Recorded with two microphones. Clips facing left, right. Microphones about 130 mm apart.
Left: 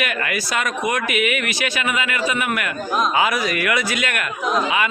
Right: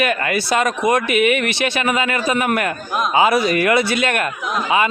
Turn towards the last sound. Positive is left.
turn(degrees=-30)  # may be behind; listen again after turning